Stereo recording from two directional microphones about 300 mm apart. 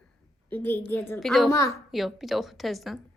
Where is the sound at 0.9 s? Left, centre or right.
Centre.